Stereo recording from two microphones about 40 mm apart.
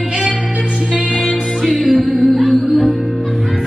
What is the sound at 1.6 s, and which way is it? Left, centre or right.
Music, centre.